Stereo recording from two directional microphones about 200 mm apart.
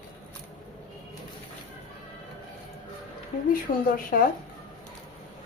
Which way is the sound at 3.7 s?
45° left (ahead or behind).